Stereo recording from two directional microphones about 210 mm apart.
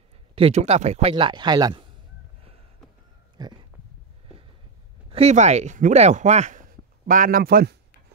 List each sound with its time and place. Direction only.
0.4 s speech: 30° right (ahead or behind)
3.4 s speech: 20° right (ahead or behind)
5.1 s speech: 30° right (ahead or behind)